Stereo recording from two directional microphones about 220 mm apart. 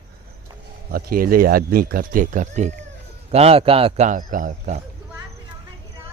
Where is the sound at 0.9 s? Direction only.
45° right (ahead or behind).